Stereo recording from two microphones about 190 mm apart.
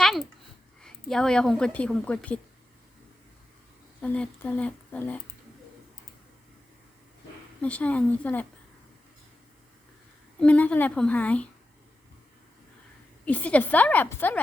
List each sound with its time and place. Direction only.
0.0 s a sound: centre (ahead or behind)
0.8 s a woman's voice: 5° left (ahead or behind)
4.0 s speech: 5° left (ahead or behind)
7.6 s speech: 5° left (ahead or behind)
10.3 s speech: 5° left (ahead or behind)
13.2 s speech: 10° left (ahead or behind)